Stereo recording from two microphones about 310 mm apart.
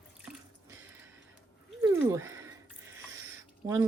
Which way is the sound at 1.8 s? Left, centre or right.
Centre.